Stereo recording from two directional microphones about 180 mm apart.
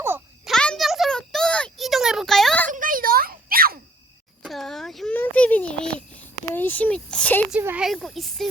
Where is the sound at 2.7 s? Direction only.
50° right (ahead or behind).